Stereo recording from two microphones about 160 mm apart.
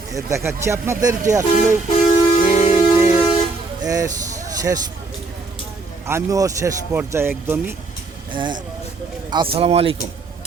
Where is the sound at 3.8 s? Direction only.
20° right (ahead or behind).